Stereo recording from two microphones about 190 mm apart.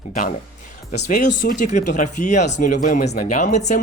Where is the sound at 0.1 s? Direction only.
45° left (ahead or behind).